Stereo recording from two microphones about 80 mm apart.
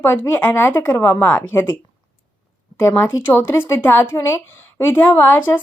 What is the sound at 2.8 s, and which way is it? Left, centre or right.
Speech, left.